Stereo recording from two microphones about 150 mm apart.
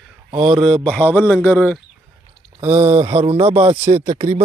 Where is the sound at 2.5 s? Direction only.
45° right (ahead or behind).